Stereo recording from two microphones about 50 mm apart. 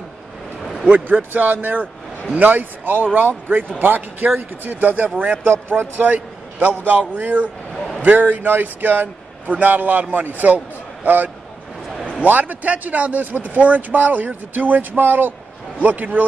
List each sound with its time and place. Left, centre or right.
0.8 s speech: right
5.9 s a man's voice: right
7.7 s a sound: centre
8.0 s speech: right